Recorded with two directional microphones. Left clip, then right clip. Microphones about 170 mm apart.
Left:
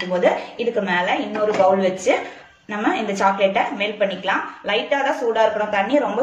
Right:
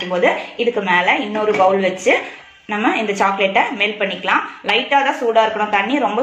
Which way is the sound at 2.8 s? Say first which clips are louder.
Right 2 dB; 30° right (ahead or behind).